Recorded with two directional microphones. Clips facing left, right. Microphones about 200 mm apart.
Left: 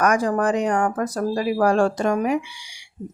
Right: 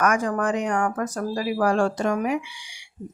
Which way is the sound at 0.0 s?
35° left (ahead or behind).